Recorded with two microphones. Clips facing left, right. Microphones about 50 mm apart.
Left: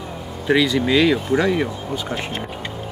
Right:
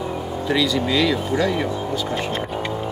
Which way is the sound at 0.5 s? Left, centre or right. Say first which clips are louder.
Left 4 dB; left.